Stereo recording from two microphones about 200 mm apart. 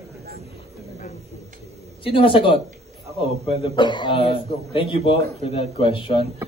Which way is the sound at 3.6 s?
25° left (ahead or behind).